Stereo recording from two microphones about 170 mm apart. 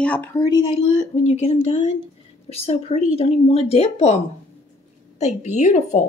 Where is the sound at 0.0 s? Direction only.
10° left (ahead or behind).